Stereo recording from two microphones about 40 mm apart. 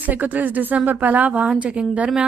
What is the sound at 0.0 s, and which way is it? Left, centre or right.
A woman's voice, right.